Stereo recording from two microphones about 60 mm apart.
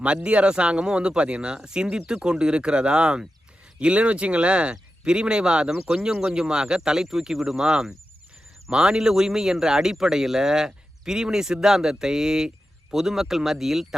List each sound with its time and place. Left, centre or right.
0.0 s speech: centre